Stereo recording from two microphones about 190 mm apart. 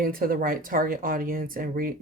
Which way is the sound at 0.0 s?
50° right (ahead or behind).